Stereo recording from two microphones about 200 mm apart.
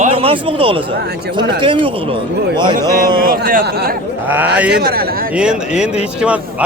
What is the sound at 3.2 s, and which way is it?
Speech, 45° right (ahead or behind).